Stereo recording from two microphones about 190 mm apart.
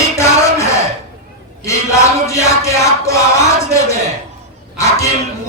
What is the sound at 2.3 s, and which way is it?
Music, 15° left (ahead or behind).